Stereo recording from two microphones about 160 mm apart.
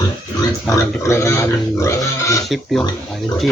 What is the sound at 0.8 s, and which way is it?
Speech, 15° left (ahead or behind).